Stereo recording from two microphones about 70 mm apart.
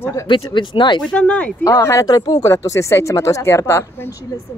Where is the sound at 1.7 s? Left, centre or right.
Left.